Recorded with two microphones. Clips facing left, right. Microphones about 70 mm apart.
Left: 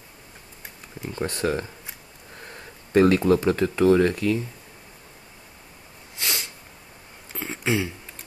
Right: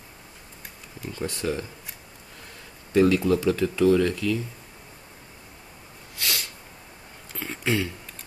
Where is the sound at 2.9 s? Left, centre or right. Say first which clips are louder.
Left 2 dB; left.